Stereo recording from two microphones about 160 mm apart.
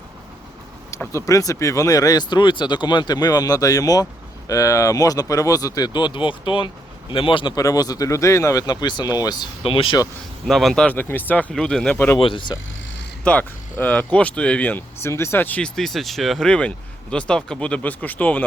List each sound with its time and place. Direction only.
0.9 s speech: 20° left (ahead or behind)
10.4 s speech: centre (ahead or behind)
12.2 s speech: 30° left (ahead or behind)
13.2 s speech: 10° left (ahead or behind)